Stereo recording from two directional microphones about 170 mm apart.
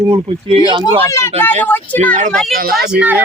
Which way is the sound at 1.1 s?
15° left (ahead or behind).